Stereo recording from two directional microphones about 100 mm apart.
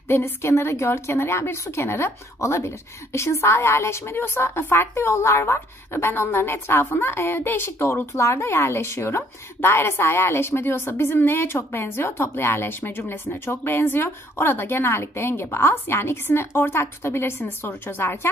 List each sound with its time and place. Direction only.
0.1 s a woman's voice: 25° left (ahead or behind)